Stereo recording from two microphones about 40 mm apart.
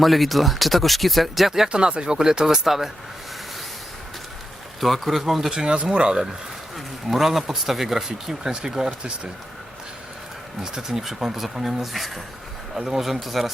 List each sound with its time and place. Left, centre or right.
0.0 s speech: centre
1.7 s speech: right; by 2.9 s centre
4.8 s speech: centre
5.5 s speech: right
6.7 s speech: centre
10.6 s speech: centre